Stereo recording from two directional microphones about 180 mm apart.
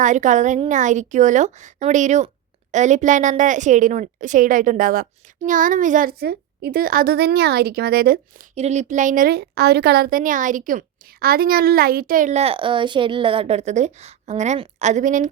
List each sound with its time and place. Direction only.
0.0 s a woman's voice: 45° right (ahead or behind)
8.5 s a woman's voice: 40° right (ahead or behind)